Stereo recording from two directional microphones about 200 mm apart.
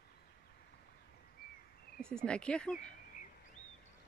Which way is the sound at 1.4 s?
50° left (ahead or behind).